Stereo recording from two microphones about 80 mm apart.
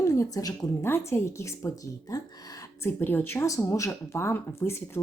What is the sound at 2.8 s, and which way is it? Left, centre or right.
Speech, left.